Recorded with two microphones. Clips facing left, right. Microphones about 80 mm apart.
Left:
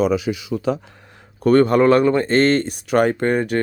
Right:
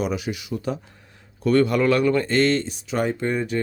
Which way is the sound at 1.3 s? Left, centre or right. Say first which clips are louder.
Left 5 dB; left.